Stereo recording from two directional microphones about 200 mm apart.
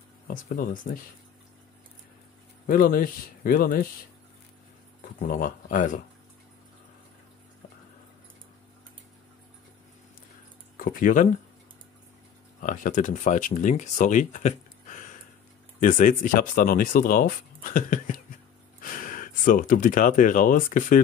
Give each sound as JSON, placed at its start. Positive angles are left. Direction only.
{"t": 0.3, "sound": "speech", "side_deg": 45}
{"t": 2.6, "sound": "speech", "side_deg": 45}
{"t": 5.3, "sound": "speech", "side_deg": 40}
{"t": 10.8, "sound": "speech", "side_deg": 40}
{"t": 12.5, "sound": "speech", "side_deg": 40}